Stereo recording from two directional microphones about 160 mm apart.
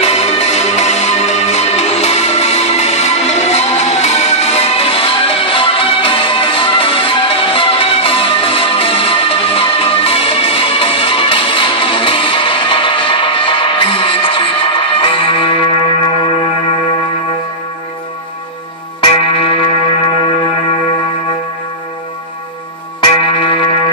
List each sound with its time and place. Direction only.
0.0 s music: 40° left (ahead or behind)
19.1 s music: 35° left (ahead or behind)
23.2 s music: 30° left (ahead or behind)